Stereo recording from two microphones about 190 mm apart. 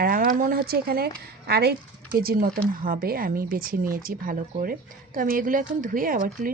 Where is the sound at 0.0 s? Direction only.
50° right (ahead or behind).